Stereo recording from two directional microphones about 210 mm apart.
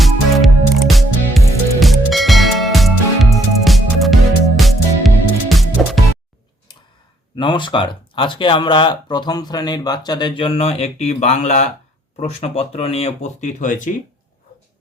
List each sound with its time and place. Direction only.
0.0 s music: centre (ahead or behind)
6.7 s a sound: 20° left (ahead or behind)
7.3 s speech: 25° left (ahead or behind)